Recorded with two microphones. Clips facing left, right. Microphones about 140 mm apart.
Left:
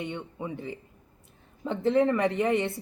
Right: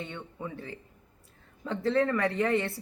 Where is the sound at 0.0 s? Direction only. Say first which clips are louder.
Left 4 dB; 20° left (ahead or behind).